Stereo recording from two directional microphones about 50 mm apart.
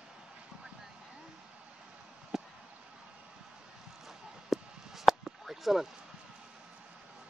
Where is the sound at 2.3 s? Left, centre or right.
Centre.